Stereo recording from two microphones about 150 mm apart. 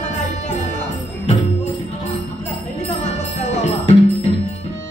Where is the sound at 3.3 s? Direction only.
50° left (ahead or behind).